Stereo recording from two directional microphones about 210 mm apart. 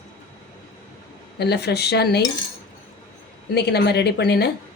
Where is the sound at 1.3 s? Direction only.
50° left (ahead or behind).